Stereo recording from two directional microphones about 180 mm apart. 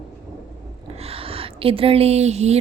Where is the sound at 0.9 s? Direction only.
35° right (ahead or behind).